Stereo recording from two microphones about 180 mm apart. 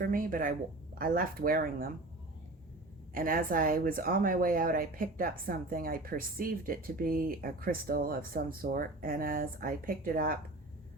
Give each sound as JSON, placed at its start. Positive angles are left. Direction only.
{"t": 0.0, "sound": "speech", "side_deg": -50}
{"t": 3.2, "sound": "speech", "side_deg": -50}